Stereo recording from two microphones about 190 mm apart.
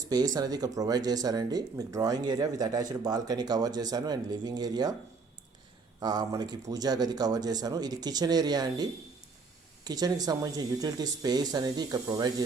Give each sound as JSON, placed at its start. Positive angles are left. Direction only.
{"t": 0.1, "sound": "speech", "side_deg": -20}
{"t": 6.0, "sound": "speech", "side_deg": -20}